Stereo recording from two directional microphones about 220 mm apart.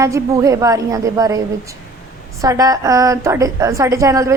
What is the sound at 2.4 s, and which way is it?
Speech, 15° right (ahead or behind).